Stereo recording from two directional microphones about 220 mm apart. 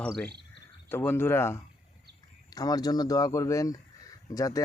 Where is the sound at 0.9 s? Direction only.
10° left (ahead or behind).